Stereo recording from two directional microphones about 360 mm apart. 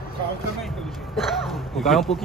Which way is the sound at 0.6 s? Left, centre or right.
Centre.